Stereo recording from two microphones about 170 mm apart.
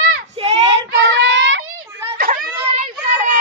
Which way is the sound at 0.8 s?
80° right.